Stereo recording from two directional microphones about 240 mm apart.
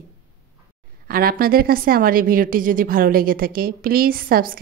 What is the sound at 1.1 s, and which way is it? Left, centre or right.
A woman's voice, right.